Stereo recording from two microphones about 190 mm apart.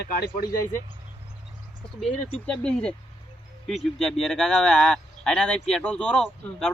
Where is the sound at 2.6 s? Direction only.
5° left (ahead or behind).